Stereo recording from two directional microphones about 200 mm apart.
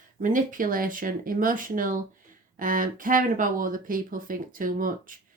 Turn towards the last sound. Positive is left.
turn(degrees=-45)  # may be behind; listen again after turning